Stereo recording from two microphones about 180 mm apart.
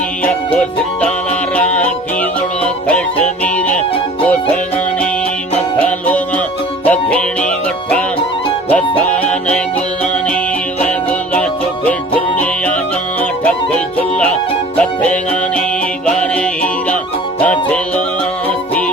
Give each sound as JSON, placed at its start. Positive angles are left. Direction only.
{"t": 0.3, "sound": "music", "side_deg": 5}
{"t": 5.8, "sound": "music", "side_deg": 10}
{"t": 8.7, "sound": "music", "side_deg": 10}
{"t": 13.4, "sound": "music", "side_deg": 5}
{"t": 17.4, "sound": "music", "side_deg": 10}